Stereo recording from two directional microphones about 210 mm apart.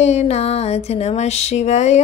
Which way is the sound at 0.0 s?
30° left (ahead or behind).